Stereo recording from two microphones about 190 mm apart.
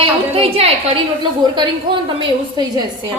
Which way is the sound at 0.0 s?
30° right (ahead or behind).